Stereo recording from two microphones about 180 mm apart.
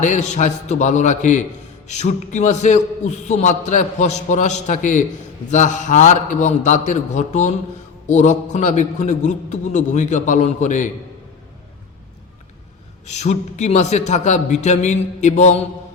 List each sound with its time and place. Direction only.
0.0 s a man's voice: 45° left (ahead or behind)
13.1 s a man's voice: 40° left (ahead or behind)